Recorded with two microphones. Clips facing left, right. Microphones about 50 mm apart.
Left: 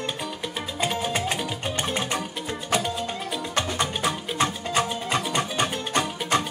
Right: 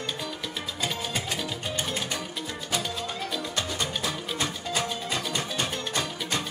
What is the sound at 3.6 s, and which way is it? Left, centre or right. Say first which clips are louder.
Music: left 6 dB; left.